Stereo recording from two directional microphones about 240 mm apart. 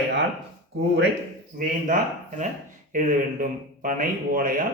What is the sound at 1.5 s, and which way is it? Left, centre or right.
Speech, right.